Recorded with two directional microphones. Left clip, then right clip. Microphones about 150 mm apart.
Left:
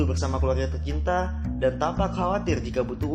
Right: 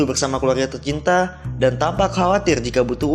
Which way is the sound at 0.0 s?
40° right (ahead or behind).